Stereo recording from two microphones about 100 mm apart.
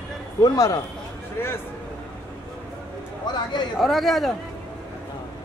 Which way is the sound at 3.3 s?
50° left (ahead or behind).